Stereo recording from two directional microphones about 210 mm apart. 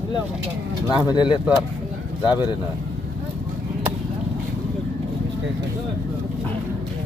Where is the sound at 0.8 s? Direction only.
20° left (ahead or behind).